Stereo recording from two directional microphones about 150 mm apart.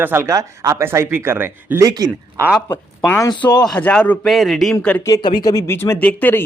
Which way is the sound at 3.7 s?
10° left (ahead or behind).